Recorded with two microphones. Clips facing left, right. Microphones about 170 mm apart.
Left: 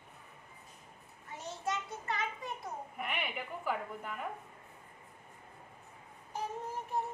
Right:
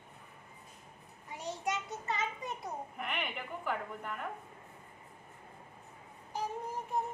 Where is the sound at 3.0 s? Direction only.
5° left (ahead or behind).